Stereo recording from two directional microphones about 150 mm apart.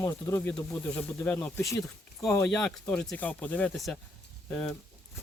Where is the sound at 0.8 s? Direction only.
15° left (ahead or behind).